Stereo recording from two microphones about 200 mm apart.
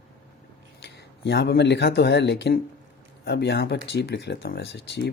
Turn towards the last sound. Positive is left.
turn(degrees=60)  # may be behind; listen again after turning